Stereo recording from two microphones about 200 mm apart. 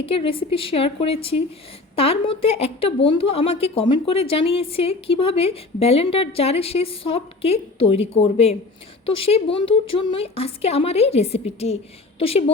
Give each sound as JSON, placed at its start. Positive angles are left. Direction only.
{"t": 0.0, "sound": "a woman's voice", "side_deg": 25}